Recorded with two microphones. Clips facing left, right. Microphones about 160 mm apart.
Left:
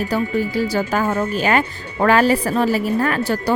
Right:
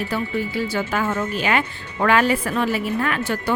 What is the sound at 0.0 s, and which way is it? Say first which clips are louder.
Speech: left 4 dB; 40° left (ahead or behind).